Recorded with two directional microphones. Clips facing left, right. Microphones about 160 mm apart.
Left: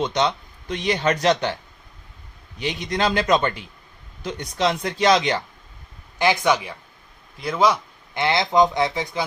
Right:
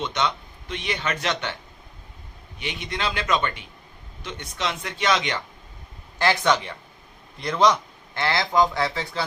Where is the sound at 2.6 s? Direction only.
35° left (ahead or behind).